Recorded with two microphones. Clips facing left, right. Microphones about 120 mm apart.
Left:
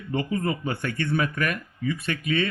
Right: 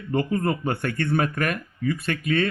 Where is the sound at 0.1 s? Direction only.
45° right (ahead or behind).